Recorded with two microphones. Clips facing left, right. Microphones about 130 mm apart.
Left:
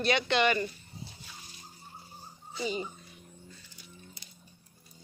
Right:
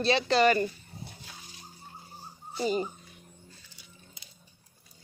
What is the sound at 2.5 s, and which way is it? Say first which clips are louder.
Speech: right 5 dB; 45° right (ahead or behind).